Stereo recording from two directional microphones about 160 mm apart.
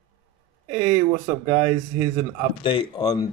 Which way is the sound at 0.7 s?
55° right (ahead or behind).